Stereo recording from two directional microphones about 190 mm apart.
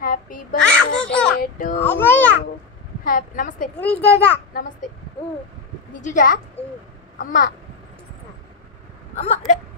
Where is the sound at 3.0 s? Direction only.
45° left (ahead or behind).